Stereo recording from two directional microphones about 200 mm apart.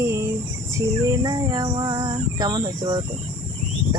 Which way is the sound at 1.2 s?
20° right (ahead or behind).